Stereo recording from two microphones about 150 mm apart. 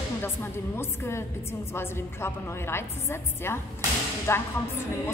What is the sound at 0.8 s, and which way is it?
A woman's voice, 15° left (ahead or behind).